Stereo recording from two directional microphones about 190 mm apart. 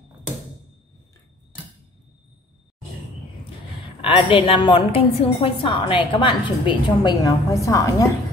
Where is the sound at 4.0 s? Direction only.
25° left (ahead or behind).